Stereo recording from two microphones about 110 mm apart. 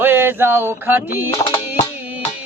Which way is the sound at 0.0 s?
20° right (ahead or behind).